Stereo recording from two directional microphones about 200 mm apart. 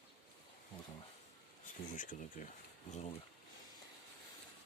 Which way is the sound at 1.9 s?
40° left (ahead or behind).